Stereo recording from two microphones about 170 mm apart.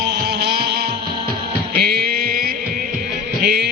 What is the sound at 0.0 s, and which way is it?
Music, 70° right (ahead or behind).